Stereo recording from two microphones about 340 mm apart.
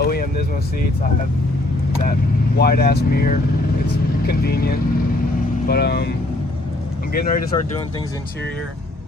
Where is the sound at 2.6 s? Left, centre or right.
Left.